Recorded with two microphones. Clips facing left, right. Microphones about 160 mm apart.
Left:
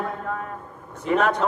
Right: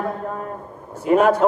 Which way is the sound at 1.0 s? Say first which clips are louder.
Right 6 dB; 45° right (ahead or behind).